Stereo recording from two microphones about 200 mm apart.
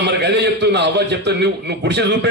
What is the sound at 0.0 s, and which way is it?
A man's voice, 55° right (ahead or behind).